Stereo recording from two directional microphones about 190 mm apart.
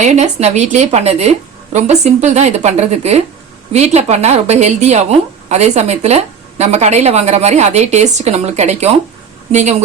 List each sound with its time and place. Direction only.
0.0 s a woman's voice: 35° right (ahead or behind)